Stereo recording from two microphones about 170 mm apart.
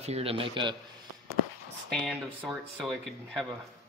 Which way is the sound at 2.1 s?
10° right (ahead or behind).